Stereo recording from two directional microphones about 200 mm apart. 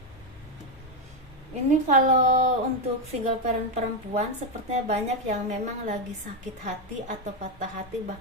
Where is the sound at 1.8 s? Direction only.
40° right (ahead or behind).